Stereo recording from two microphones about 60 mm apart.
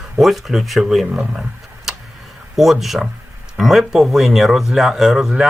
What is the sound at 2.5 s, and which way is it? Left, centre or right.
Speech, centre.